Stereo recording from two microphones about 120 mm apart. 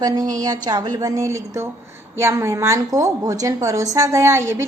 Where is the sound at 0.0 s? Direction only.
30° right (ahead or behind).